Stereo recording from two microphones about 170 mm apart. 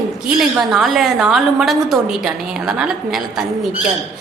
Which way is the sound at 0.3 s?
Centre (ahead or behind).